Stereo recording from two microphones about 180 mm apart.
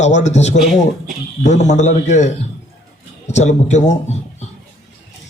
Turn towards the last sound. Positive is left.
turn(degrees=40)  # may be behind; listen again after turning